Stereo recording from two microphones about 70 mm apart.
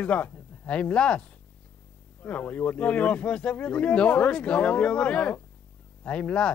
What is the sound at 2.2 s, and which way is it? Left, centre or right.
Speech, centre.